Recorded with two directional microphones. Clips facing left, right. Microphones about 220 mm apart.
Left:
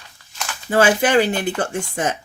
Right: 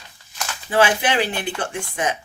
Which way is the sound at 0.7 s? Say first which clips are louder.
Left 4 dB; 45° left (ahead or behind).